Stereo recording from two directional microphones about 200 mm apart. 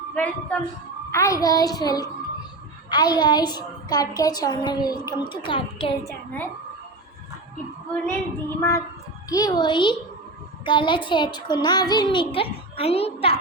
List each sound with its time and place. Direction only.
0.1 s a woman's voice: 5° left (ahead or behind)
8.0 s a sound: 10° left (ahead or behind)
9.3 s a woman's voice: 20° left (ahead or behind)